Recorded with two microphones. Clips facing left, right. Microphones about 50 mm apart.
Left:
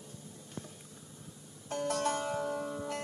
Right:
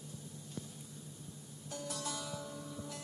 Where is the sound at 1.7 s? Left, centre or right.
Left.